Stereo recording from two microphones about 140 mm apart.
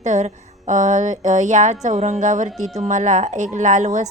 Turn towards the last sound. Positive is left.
turn(degrees=-60)  # may be behind; listen again after turning